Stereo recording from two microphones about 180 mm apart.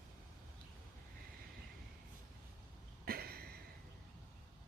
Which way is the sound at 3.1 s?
55° right (ahead or behind).